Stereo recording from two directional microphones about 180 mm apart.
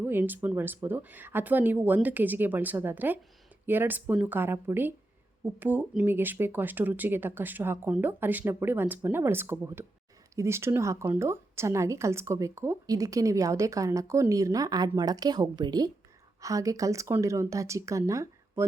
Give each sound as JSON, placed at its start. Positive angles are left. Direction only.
{"t": 0.0, "sound": "a woman's voice", "side_deg": -10}